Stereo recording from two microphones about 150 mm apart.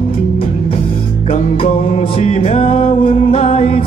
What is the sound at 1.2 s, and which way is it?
Music, 45° left (ahead or behind).